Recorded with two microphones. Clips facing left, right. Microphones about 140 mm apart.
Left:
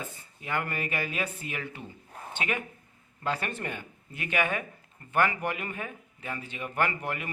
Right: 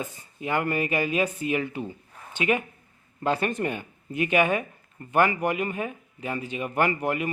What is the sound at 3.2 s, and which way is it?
A man's voice, 20° right (ahead or behind).